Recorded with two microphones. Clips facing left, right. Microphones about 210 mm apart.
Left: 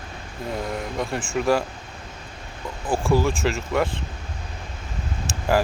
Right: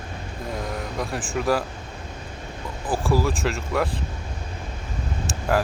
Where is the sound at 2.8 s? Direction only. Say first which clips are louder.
Left 2 dB; centre (ahead or behind).